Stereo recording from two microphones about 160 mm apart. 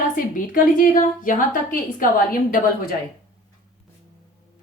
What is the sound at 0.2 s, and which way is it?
A woman's voice, 60° left (ahead or behind).